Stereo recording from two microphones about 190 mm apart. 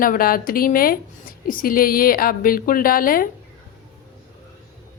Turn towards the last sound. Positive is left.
turn(degrees=50)  # may be behind; listen again after turning